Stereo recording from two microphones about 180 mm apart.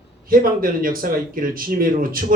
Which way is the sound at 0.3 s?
50° right (ahead or behind).